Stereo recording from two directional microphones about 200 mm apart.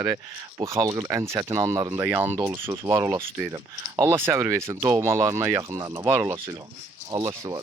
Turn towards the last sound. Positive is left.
turn(degrees=-15)  # may be behind; listen again after turning